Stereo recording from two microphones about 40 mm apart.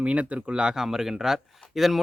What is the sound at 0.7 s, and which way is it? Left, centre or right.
Speech, centre.